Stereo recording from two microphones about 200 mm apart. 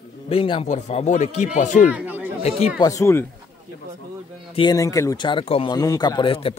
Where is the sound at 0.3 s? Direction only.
25° left (ahead or behind).